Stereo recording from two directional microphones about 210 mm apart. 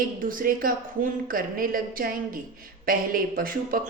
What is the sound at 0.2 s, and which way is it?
A woman's voice, 40° right (ahead or behind).